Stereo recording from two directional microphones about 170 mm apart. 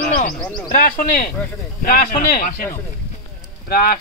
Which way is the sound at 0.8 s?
55° left (ahead or behind).